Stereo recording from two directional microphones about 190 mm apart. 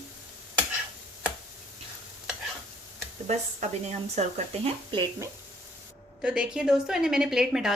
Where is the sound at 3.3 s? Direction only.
35° right (ahead or behind).